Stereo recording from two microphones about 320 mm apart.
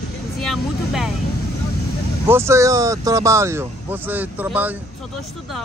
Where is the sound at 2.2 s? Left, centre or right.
Centre.